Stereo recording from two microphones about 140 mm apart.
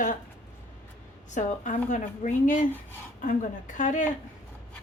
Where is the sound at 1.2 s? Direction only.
60° left (ahead or behind).